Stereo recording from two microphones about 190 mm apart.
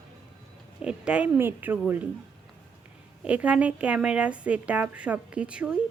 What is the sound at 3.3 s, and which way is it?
A woman's voice, 5° right (ahead or behind).